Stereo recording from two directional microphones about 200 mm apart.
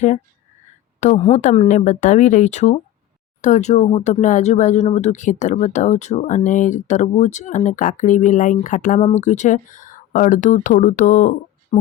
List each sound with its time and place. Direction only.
0.9 s speech: 35° left (ahead or behind)